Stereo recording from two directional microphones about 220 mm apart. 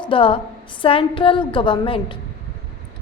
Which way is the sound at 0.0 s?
25° left (ahead or behind).